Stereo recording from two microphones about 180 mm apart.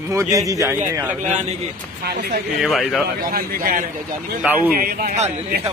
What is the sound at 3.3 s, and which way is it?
Speech, 50° right (ahead or behind).